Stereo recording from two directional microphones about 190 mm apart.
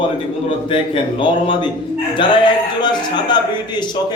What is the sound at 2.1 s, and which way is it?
A man's voice, 25° left (ahead or behind).